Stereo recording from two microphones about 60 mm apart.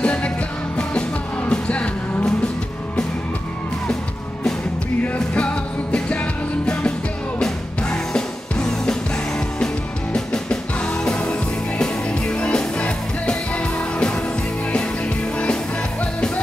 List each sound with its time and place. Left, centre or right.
0.0 s music: left
1.4 s music: centre
5.0 s music: left
10.1 s music: centre
15.3 s music: centre